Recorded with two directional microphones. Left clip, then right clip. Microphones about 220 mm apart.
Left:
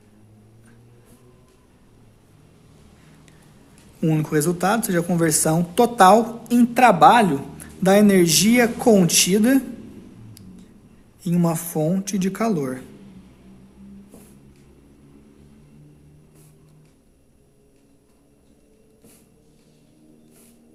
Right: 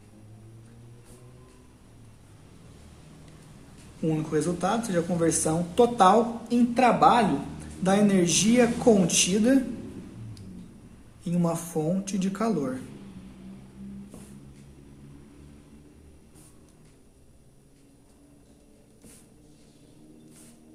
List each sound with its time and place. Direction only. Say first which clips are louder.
4.0 s speech: left 5 dB; 45° left (ahead or behind)
11.2 s speech: left 5 dB; 45° left (ahead or behind)